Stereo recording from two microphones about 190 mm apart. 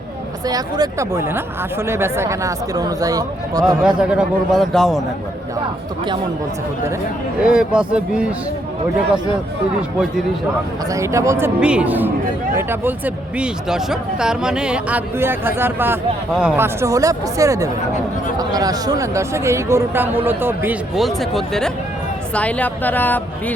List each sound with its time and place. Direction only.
0.4 s speech: 20° right (ahead or behind)
3.8 s a man's voice: 5° right (ahead or behind)
7.4 s a man's voice: 5° right (ahead or behind)
10.9 s a woman's voice: 15° right (ahead or behind); by 23.6 s 10° left (ahead or behind)